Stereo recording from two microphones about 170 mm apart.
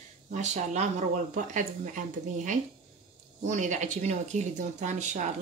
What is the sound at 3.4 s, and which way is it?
Speech, 45° right (ahead or behind).